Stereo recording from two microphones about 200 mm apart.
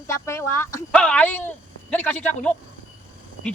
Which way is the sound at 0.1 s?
15° left (ahead or behind).